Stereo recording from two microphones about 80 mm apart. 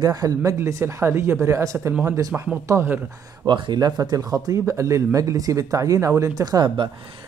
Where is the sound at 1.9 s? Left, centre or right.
Right.